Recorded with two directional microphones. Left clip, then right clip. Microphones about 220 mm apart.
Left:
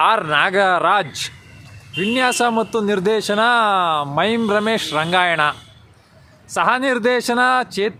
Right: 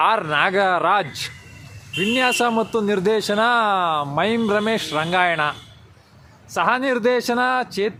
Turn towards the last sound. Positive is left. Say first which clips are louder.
# left 4 dB
turn(degrees=15)  # may be behind; listen again after turning